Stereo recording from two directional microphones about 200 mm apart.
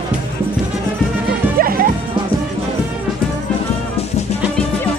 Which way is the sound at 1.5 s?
45° right (ahead or behind).